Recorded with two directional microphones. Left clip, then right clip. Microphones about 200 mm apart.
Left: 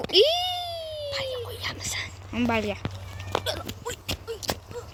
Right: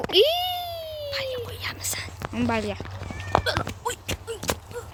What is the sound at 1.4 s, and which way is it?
Whispering, 25° left (ahead or behind).